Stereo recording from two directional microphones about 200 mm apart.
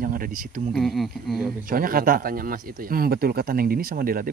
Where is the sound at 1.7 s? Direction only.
45° right (ahead or behind).